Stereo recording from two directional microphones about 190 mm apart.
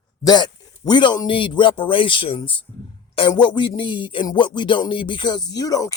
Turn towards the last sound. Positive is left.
turn(degrees=20)  # may be behind; listen again after turning